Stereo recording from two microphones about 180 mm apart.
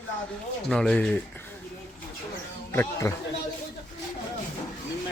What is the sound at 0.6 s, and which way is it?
Speech, 5° left (ahead or behind).